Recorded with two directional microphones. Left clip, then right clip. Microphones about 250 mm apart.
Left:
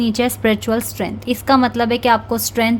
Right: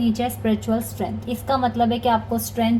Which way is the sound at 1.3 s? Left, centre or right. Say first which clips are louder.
Left 8 dB; left.